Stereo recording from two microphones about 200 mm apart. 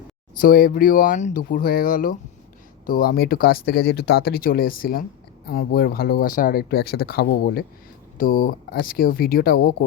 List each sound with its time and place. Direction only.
0.3 s speech: 45° left (ahead or behind)